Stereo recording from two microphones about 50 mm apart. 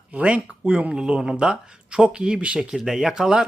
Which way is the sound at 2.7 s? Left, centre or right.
Centre.